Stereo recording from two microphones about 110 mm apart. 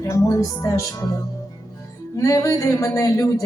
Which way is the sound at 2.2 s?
30° left (ahead or behind).